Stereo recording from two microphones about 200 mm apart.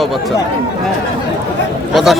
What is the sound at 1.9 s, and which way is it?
Speech, centre (ahead or behind).